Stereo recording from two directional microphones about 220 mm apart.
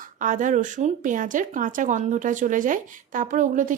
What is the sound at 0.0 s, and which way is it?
Speech, 35° right (ahead or behind).